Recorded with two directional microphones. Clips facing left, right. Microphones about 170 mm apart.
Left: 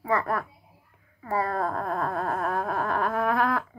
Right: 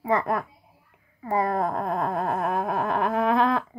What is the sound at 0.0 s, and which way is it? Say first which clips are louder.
Speech: right 2 dB; 20° right (ahead or behind).